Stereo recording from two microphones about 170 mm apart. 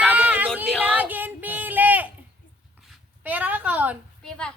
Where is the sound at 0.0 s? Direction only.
10° right (ahead or behind).